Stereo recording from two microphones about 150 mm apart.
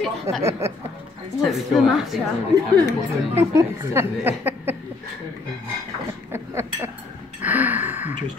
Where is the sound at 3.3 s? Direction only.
15° right (ahead or behind).